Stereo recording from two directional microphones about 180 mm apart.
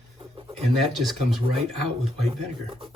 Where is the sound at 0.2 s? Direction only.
30° right (ahead or behind).